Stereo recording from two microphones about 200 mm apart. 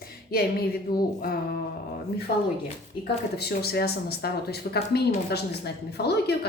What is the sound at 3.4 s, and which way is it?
A woman's voice, 55° left (ahead or behind).